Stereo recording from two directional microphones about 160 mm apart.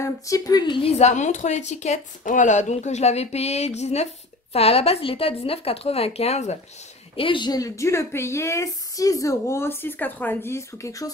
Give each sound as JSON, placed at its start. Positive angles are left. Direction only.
{"t": 0.0, "sound": "a woman's voice", "side_deg": 20}
{"t": 0.8, "sound": "a woman's voice", "side_deg": 45}
{"t": 7.2, "sound": "a woman's voice", "side_deg": 30}